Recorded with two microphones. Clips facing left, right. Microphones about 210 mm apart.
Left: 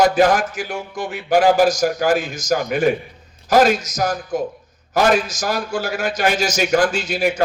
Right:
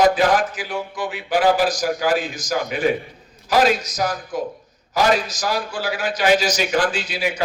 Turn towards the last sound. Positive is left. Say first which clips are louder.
# left 5 dB
turn(degrees=45)  # may be behind; listen again after turning